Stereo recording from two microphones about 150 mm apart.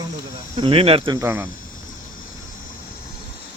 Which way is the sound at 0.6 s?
40° right (ahead or behind).